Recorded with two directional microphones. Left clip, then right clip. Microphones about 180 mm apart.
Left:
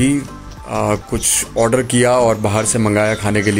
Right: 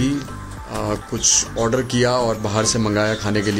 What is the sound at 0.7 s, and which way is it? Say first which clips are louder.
Speech: left 7 dB; 15° left (ahead or behind).